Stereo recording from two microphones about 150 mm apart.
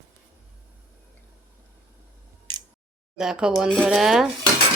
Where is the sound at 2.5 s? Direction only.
30° right (ahead or behind).